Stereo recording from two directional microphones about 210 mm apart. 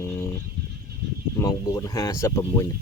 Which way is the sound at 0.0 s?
15° left (ahead or behind).